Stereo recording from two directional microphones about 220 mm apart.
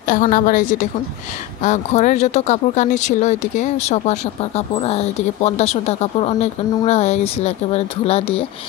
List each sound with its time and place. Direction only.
0.0 s a woman's voice: 40° left (ahead or behind)